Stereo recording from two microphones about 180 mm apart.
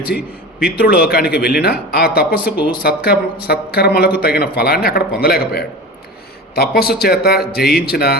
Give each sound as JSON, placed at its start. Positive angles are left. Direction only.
{"t": 0.6, "sound": "a woman's voice", "side_deg": 55}